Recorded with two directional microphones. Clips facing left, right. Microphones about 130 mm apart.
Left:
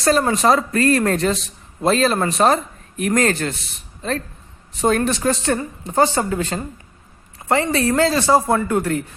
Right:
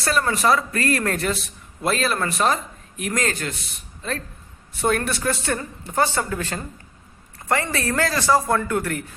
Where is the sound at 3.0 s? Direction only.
45° left (ahead or behind).